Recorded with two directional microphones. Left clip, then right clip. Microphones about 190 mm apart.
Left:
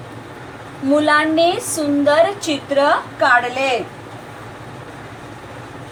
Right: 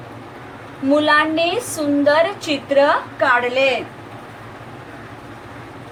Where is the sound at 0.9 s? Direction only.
40° right (ahead or behind).